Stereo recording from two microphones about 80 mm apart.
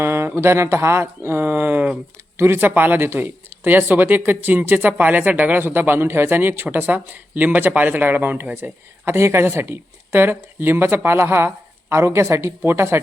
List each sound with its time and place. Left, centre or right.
0.0 s speech: right